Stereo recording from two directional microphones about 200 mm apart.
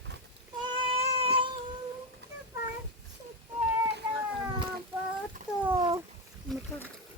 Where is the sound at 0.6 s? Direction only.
25° right (ahead or behind).